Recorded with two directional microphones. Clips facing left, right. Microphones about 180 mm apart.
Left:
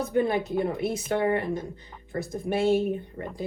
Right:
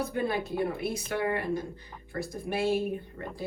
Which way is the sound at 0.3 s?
20° left (ahead or behind).